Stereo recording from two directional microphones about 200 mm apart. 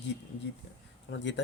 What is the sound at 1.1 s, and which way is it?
Speech, 65° left (ahead or behind).